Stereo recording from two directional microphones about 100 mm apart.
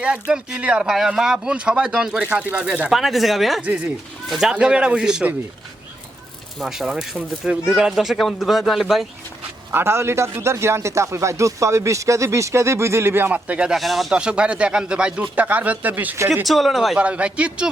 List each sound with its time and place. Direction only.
0.0 s speech: 10° right (ahead or behind)
2.9 s speech: centre (ahead or behind)
3.6 s speech: 15° right (ahead or behind)
6.6 s speech: 5° right (ahead or behind)
9.7 s a man's voice: 25° right (ahead or behind)
13.7 s speech: centre (ahead or behind); by 16.1 s 15° right (ahead or behind)
16.5 s speech: centre (ahead or behind)
17.0 s speech: 10° right (ahead or behind)